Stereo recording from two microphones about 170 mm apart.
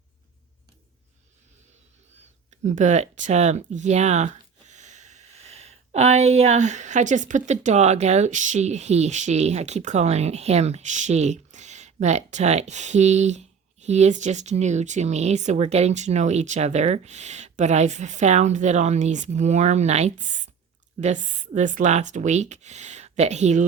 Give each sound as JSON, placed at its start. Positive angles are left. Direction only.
{"t": 2.5, "sound": "speech", "side_deg": -45}